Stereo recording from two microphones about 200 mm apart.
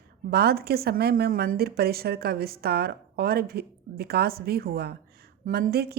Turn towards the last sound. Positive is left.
turn(degrees=-50)  # may be behind; listen again after turning